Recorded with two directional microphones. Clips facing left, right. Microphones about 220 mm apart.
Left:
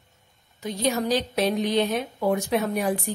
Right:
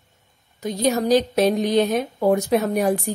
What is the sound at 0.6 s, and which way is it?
A woman's voice, 45° right (ahead or behind).